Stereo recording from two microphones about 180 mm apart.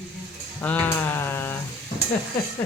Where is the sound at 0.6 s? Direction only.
10° left (ahead or behind).